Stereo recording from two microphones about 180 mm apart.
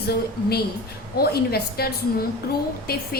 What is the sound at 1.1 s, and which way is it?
A woman's voice, 60° left (ahead or behind).